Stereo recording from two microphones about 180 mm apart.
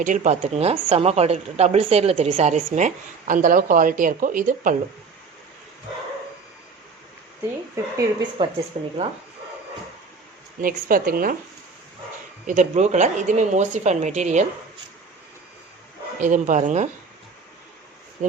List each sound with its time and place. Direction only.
0.0 s a woman's voice: 45° right (ahead or behind)
7.8 s a woman's voice: 15° right (ahead or behind); by 8.9 s 35° right (ahead or behind)
10.6 s a woman's voice: 50° right (ahead or behind)
12.5 s a woman's voice: 40° right (ahead or behind)
16.2 s a woman's voice: 45° right (ahead or behind)